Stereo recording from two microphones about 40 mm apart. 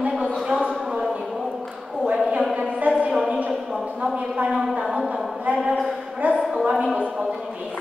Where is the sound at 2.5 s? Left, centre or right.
Right.